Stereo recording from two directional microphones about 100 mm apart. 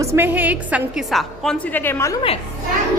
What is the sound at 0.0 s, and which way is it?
Speech, 30° right (ahead or behind).